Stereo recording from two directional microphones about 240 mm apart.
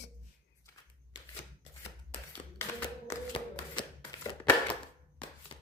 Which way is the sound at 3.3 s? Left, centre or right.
Centre.